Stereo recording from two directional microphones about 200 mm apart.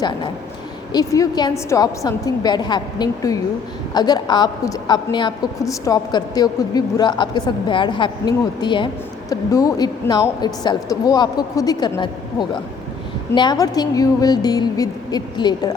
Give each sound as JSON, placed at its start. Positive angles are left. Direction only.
{"t": 0.9, "sound": "a woman's voice", "side_deg": 20}